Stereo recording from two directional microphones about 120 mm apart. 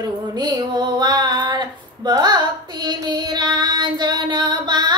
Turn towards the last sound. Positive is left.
turn(degrees=-35)  # may be behind; listen again after turning